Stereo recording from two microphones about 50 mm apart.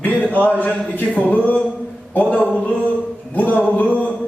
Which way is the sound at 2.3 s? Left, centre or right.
Left.